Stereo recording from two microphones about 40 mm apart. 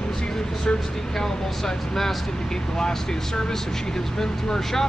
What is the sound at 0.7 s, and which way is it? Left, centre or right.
Speech, centre.